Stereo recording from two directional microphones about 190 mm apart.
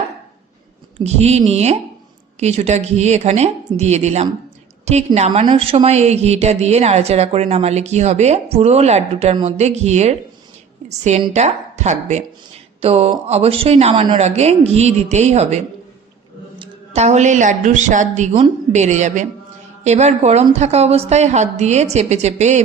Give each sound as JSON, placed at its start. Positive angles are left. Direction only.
{"t": 0.9, "sound": "speech", "side_deg": -35}